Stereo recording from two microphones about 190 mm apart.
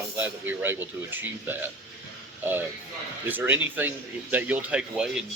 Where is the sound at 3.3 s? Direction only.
10° right (ahead or behind).